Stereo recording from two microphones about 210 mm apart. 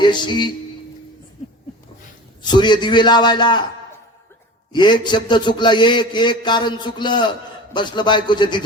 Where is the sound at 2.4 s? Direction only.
20° left (ahead or behind).